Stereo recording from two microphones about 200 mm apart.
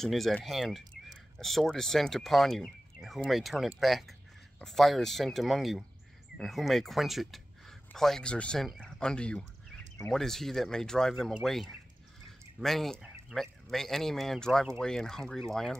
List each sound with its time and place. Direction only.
0.0 s speech: centre (ahead or behind)